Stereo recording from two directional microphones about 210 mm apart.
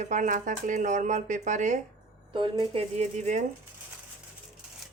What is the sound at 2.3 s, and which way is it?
Speech, 25° right (ahead or behind).